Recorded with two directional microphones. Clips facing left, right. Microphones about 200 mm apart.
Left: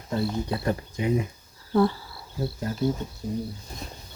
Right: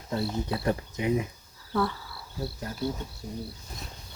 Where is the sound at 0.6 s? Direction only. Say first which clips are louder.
Left 1 dB; 20° right (ahead or behind).